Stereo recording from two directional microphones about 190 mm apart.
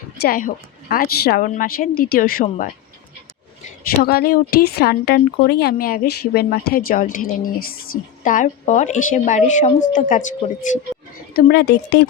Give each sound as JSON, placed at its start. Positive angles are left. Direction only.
{"t": 0.2, "sound": "speech", "side_deg": 50}
{"t": 3.8, "sound": "a woman's voice", "side_deg": 55}
{"t": 11.3, "sound": "a woman's voice", "side_deg": 55}